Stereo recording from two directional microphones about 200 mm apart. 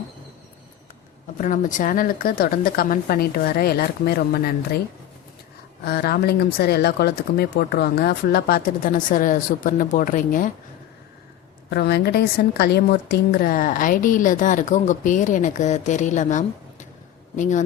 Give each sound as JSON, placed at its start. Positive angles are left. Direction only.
{"t": 1.4, "sound": "speech", "side_deg": 40}
{"t": 5.8, "sound": "speech", "side_deg": 50}
{"t": 11.7, "sound": "a woman's voice", "side_deg": 55}